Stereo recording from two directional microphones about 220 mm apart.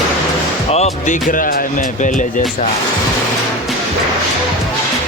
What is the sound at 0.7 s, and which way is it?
Speech, 30° left (ahead or behind).